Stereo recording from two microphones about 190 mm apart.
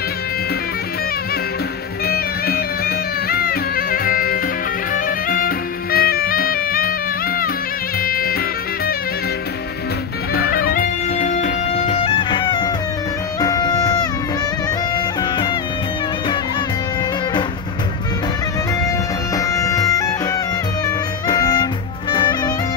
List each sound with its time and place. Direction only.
2.0 s music: 55° left (ahead or behind)
8.0 s music: 50° left (ahead or behind)
10.3 s music: 50° left (ahead or behind); by 15.5 s 20° left (ahead or behind)
19.3 s music: 15° left (ahead or behind)